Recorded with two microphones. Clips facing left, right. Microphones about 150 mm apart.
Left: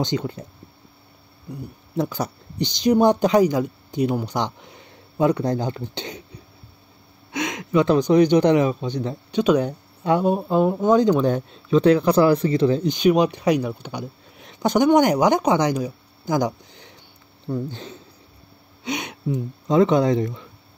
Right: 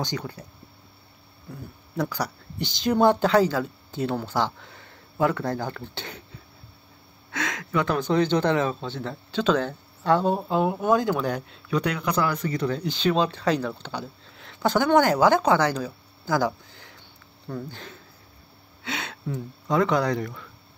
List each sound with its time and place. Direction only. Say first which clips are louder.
0.0 s speech: left 7 dB; 20° left (ahead or behind)
1.5 s speech: left 6 dB; 20° left (ahead or behind)